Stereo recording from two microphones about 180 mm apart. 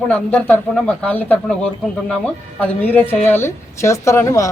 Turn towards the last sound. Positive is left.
turn(degrees=15)  # may be behind; listen again after turning